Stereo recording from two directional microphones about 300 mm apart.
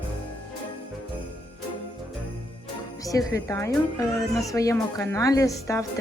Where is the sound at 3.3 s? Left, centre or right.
Centre.